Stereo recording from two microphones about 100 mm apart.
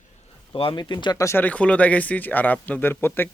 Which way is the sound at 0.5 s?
65° left (ahead or behind).